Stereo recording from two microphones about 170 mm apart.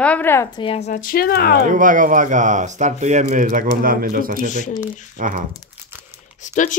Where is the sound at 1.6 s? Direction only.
50° right (ahead or behind).